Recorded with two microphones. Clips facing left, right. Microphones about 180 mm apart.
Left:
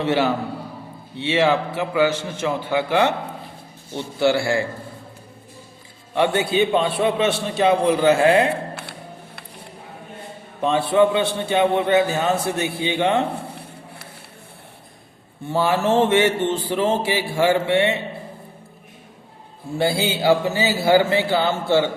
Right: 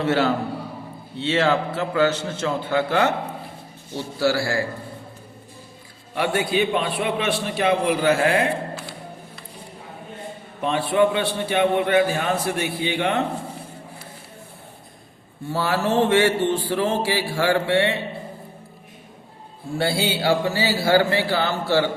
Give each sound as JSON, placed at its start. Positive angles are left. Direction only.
{"t": 0.0, "sound": "a man's voice", "side_deg": 15}
{"t": 6.1, "sound": "a man's voice", "side_deg": 25}
{"t": 8.7, "sound": "a sound", "side_deg": 65}
{"t": 10.6, "sound": "a man's voice", "side_deg": 25}
{"t": 15.4, "sound": "a man's voice", "side_deg": 20}
{"t": 20.5, "sound": "a man's voice", "side_deg": 20}